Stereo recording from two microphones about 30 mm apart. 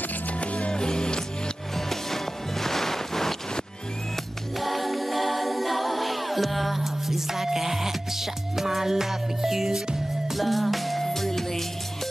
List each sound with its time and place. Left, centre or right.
0.4 s music: left
0.7 s music: left
1.9 s music: centre
4.6 s music: centre
10.3 s music: centre
11.0 s music: centre